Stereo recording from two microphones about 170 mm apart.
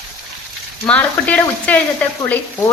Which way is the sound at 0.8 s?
10° left (ahead or behind).